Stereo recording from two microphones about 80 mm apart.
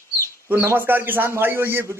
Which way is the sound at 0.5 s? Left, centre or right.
Right.